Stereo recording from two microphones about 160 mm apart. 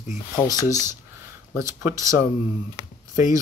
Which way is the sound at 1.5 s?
20° right (ahead or behind).